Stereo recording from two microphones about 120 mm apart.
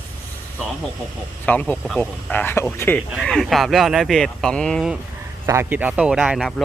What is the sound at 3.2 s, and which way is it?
Speech, centre (ahead or behind).